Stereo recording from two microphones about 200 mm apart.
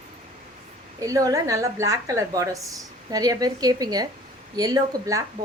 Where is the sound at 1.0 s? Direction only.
15° right (ahead or behind).